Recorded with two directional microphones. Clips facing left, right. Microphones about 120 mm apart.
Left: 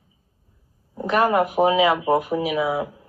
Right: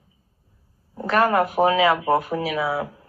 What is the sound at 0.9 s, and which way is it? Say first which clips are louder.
Speech: even; 15° left (ahead or behind).